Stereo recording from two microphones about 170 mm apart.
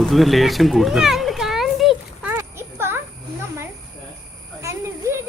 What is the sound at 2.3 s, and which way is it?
Clip-clop, 15° right (ahead or behind).